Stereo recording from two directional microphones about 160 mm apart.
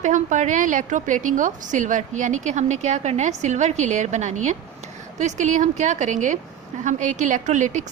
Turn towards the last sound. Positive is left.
turn(degrees=-50)  # may be behind; listen again after turning